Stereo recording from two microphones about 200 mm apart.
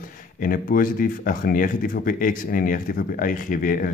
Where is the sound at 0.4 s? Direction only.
45° left (ahead or behind).